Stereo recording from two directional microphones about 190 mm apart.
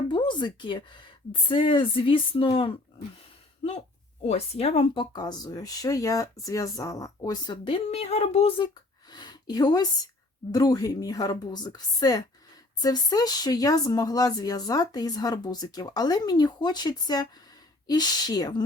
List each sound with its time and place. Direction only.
0.1 s speech: 25° left (ahead or behind)